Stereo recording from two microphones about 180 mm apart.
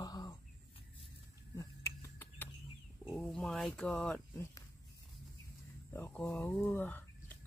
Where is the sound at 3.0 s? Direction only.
5° left (ahead or behind).